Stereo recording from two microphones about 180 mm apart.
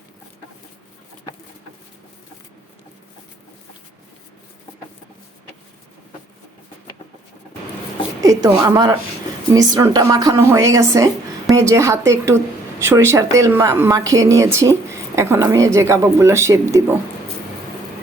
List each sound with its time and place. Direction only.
8.2 s a woman's voice: 20° right (ahead or behind)